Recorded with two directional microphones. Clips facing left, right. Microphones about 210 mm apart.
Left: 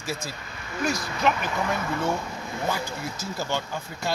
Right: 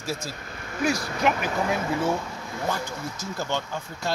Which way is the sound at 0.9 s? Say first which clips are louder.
Right 1 dB; 40° right (ahead or behind).